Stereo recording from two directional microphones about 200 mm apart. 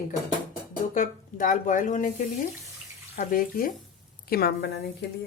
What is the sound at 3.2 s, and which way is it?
Speech, 45° left (ahead or behind).